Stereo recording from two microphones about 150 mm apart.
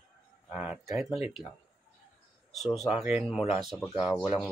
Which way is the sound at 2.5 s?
Centre (ahead or behind).